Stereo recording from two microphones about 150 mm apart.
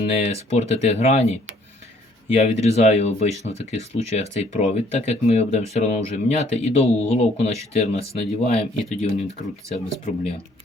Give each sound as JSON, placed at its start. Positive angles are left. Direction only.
{"t": 0.1, "sound": "speech", "side_deg": 45}